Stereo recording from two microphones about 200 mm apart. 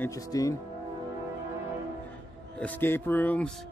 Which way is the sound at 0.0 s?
15° left (ahead or behind).